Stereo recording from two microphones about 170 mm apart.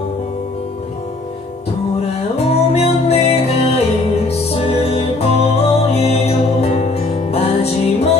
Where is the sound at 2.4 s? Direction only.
35° left (ahead or behind).